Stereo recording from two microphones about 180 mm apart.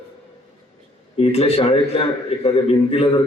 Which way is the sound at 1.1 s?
35° left (ahead or behind).